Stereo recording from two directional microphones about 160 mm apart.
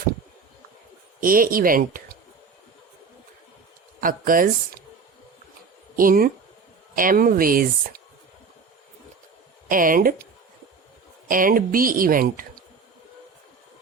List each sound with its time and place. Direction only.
1.2 s speech: 60° right (ahead or behind)
4.0 s speech: 60° right (ahead or behind)
6.0 s speech: 60° right (ahead or behind)
9.6 s speech: 60° right (ahead or behind)
11.3 s speech: 60° right (ahead or behind)